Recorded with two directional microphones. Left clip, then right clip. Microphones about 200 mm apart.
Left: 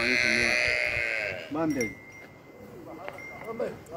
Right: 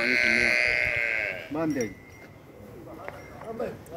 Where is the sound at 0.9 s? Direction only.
55° left (ahead or behind).